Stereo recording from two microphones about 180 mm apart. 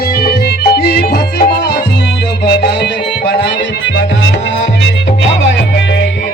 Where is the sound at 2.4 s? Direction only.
65° left (ahead or behind).